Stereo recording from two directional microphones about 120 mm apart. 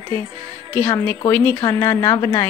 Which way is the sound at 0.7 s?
15° left (ahead or behind).